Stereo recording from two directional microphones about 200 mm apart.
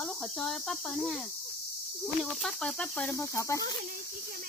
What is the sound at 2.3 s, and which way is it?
Cricket, centre (ahead or behind).